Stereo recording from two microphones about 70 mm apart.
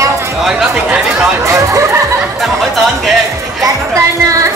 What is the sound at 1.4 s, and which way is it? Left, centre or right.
Speech, right.